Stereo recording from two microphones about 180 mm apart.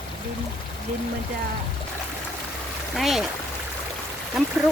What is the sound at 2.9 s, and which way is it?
Speech, centre (ahead or behind).